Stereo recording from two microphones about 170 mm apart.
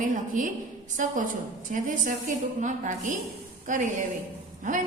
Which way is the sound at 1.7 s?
50° right (ahead or behind).